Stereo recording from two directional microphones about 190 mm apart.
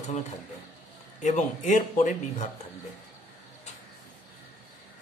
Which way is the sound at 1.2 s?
40° left (ahead or behind).